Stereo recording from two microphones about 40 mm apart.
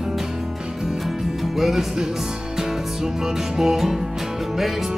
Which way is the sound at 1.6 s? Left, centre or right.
Centre.